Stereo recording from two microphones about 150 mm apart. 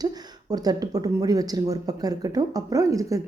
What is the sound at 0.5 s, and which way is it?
Speech, 25° right (ahead or behind).